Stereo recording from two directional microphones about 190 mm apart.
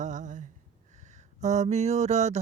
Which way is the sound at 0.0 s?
40° right (ahead or behind).